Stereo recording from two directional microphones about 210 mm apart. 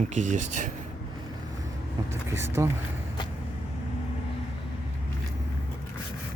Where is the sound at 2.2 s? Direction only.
10° right (ahead or behind).